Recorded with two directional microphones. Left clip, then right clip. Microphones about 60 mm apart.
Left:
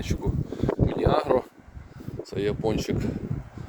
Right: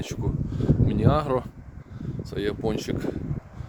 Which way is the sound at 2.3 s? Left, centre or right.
Right.